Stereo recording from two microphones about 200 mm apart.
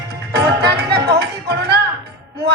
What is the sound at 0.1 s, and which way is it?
Music, 55° right (ahead or behind).